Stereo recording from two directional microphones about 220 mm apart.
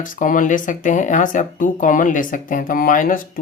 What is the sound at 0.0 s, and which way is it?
Speech, 35° left (ahead or behind).